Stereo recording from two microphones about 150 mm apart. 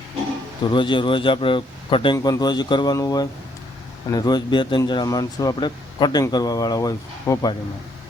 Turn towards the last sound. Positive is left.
turn(degrees=25)  # may be behind; listen again after turning